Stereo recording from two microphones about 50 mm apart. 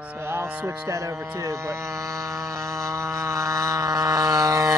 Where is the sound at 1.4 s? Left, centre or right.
Right.